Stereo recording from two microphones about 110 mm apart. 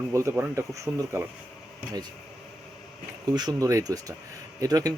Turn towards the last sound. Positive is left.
turn(degrees=-35)  # may be behind; listen again after turning